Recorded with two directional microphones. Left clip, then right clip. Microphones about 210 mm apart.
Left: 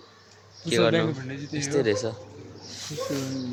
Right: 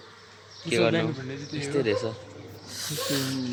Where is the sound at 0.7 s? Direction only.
10° left (ahead or behind).